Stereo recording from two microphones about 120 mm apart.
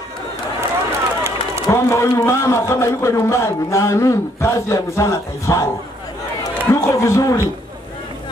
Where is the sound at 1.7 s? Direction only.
25° left (ahead or behind).